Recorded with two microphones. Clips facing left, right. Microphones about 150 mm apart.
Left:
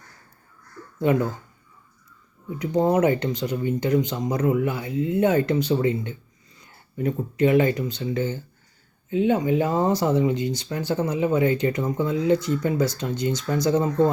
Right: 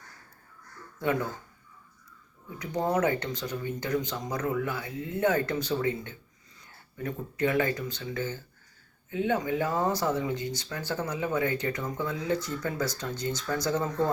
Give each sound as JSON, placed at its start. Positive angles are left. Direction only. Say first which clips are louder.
{"t": 2.6, "sound": "speech", "louder": "left 7 dB", "side_deg": 25}